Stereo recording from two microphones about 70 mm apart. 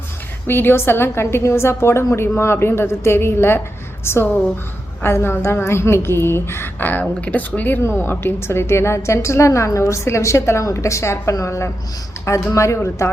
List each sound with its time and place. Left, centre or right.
0.4 s a woman's voice: left